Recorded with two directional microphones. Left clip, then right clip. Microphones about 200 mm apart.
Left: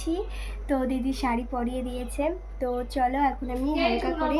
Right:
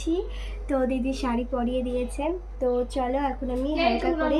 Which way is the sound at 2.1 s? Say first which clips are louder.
Left 1 dB; 20° left (ahead or behind).